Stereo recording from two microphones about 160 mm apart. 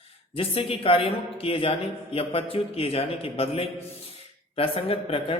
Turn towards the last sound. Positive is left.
turn(degrees=35)  # may be behind; listen again after turning